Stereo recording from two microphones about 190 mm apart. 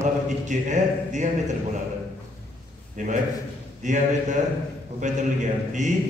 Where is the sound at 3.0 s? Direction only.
40° right (ahead or behind).